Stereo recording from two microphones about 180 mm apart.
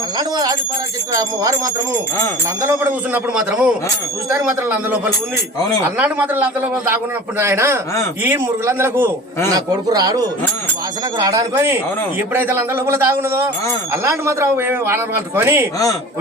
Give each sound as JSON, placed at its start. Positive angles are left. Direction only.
{"t": 0.2, "sound": "speech", "side_deg": -20}
{"t": 2.6, "sound": "a man's voice", "side_deg": -15}
{"t": 3.3, "sound": "a man's voice", "side_deg": -5}